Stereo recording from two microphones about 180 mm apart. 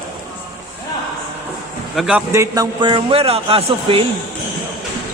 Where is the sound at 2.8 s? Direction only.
30° right (ahead or behind).